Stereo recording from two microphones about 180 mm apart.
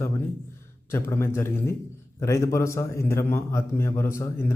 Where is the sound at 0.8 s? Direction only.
15° left (ahead or behind).